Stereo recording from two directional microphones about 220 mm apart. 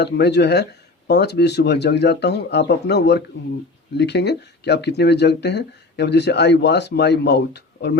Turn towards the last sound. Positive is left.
turn(degrees=50)  # may be behind; listen again after turning